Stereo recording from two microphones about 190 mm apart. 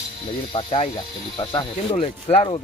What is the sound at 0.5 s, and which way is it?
Speech, 30° left (ahead or behind).